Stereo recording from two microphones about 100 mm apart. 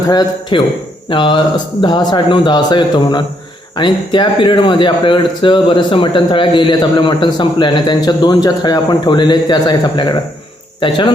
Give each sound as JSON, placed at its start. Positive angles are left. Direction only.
{"t": 0.1, "sound": "speech", "side_deg": 45}